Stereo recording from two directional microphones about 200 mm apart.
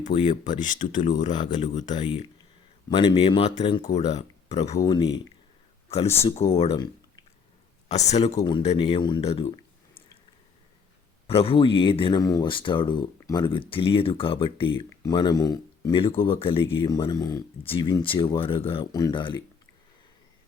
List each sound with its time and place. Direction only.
0.4 s speech: 40° left (ahead or behind)
2.9 s speech: 25° left (ahead or behind)
4.8 s speech: 20° left (ahead or behind)
6.2 s speech: 30° left (ahead or behind)
7.9 s speech: 35° left (ahead or behind)
11.3 s speech: 30° left (ahead or behind)